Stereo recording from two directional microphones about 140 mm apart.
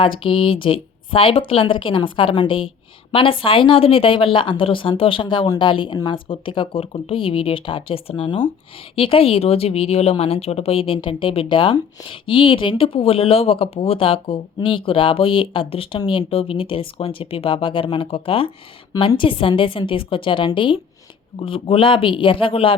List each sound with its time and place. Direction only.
0.2 s a woman's voice: 40° left (ahead or behind)